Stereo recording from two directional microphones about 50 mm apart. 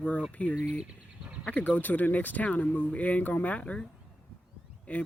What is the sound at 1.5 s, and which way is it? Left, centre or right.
Speech, left.